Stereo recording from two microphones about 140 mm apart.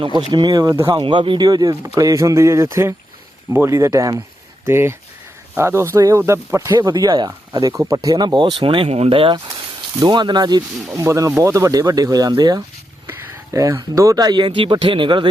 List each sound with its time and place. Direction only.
0.0 s speech: 35° right (ahead or behind)
13.1 s speech: 15° right (ahead or behind); by 15.3 s 35° right (ahead or behind)